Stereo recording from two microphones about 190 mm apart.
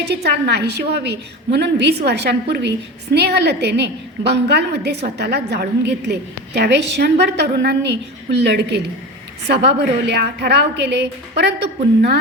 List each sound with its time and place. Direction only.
0.0 s a woman's voice: 60° right (ahead or behind)